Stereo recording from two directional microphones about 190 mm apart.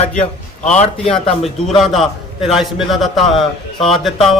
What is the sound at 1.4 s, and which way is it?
A man's voice, centre (ahead or behind).